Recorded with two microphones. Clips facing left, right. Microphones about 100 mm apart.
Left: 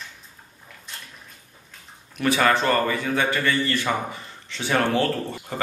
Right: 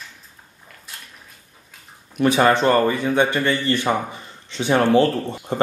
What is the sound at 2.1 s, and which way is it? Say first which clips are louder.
A man's voice: right 4 dB; 20° right (ahead or behind).